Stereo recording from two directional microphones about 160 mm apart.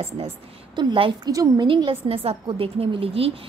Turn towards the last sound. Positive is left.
turn(degrees=-35)  # may be behind; listen again after turning